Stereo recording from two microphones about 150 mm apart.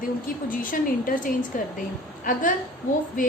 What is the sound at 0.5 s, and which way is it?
A woman's voice, 65° left (ahead or behind).